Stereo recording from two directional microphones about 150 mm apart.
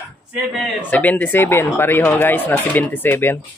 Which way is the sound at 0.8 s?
10° left (ahead or behind).